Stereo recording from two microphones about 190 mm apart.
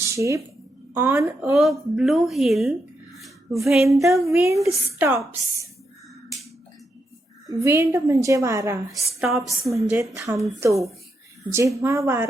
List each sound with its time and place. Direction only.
0.1 s a woman's voice: 15° right (ahead or behind)
1.5 s a woman's voice: centre (ahead or behind)
4.1 s a woman's voice: 15° right (ahead or behind)
7.4 s a woman's voice: 15° right (ahead or behind)
8.9 s a woman's voice: centre (ahead or behind)
9.7 s a woman's voice: 15° right (ahead or behind)
11.8 s a woman's voice: 15° right (ahead or behind)